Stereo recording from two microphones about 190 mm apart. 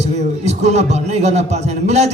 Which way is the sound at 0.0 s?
35° right (ahead or behind).